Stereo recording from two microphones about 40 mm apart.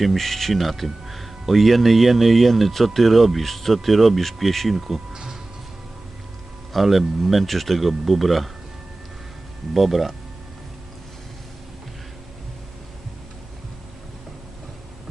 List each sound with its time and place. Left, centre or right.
0.0 s speech: centre
5.1 s music: centre
6.7 s speech: centre
9.7 s speech: centre